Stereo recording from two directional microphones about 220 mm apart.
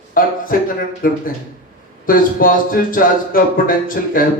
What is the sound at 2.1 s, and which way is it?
Speech, 40° left (ahead or behind).